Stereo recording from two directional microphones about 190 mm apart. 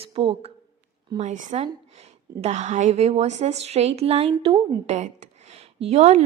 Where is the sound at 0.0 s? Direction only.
30° right (ahead or behind).